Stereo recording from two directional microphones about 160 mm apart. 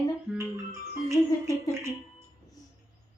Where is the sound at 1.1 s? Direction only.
20° right (ahead or behind).